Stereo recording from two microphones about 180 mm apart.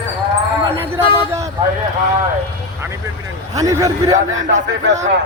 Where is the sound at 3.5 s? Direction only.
20° right (ahead or behind).